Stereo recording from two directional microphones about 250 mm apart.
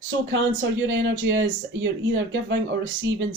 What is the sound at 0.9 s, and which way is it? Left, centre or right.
Speech, right.